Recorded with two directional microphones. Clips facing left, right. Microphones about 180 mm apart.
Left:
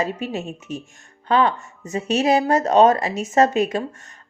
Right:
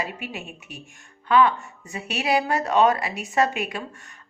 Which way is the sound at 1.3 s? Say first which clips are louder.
Even; 40° left (ahead or behind).